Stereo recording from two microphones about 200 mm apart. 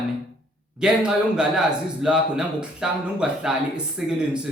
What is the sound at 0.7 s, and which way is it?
Speech, 5° right (ahead or behind).